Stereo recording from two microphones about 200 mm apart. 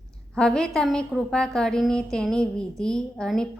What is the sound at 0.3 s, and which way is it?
A woman's voice, 5° left (ahead or behind).